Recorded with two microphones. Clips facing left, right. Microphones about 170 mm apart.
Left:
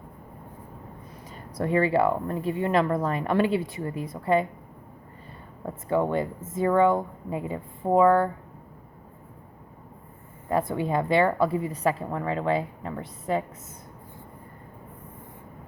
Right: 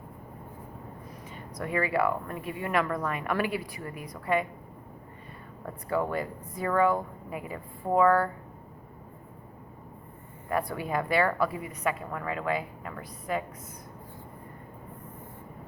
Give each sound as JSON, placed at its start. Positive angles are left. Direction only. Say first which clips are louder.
{"t": 1.3, "sound": "speech", "louder": "left 7 dB", "side_deg": 30}
{"t": 5.6, "sound": "speech", "louder": "left 4 dB", "side_deg": 25}
{"t": 10.5, "sound": "speech", "louder": "left 4 dB", "side_deg": 25}